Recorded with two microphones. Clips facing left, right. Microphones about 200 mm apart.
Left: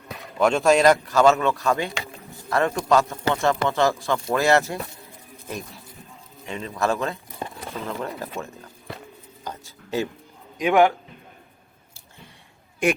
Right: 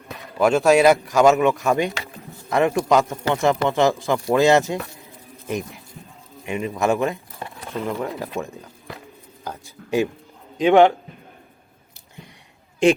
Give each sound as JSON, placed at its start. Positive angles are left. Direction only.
{"t": 0.3, "sound": "speech", "side_deg": -5}
{"t": 9.4, "sound": "a sound", "side_deg": -15}
{"t": 10.6, "sound": "a man's voice", "side_deg": -30}